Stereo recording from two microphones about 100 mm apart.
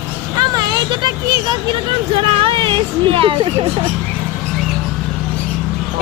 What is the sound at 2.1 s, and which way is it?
Speech, 65° right (ahead or behind).